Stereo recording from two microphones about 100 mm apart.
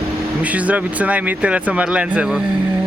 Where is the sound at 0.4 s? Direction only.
15° right (ahead or behind).